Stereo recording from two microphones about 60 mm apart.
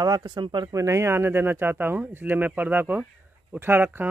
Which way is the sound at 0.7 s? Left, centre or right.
Right.